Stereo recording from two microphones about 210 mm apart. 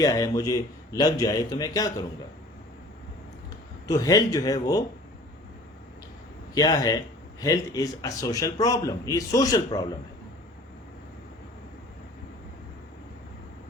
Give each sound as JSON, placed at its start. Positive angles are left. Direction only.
{"t": 0.0, "sound": "a man's voice", "side_deg": 15}
{"t": 3.8, "sound": "a man's voice", "side_deg": 15}
{"t": 6.5, "sound": "a man's voice", "side_deg": 20}